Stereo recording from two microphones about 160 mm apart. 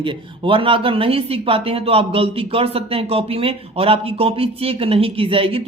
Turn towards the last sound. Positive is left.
turn(degrees=-35)  # may be behind; listen again after turning